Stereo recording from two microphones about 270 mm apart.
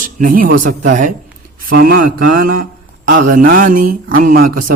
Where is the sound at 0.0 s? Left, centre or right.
Right.